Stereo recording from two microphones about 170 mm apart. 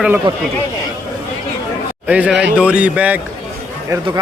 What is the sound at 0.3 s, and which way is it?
Speech, 30° right (ahead or behind).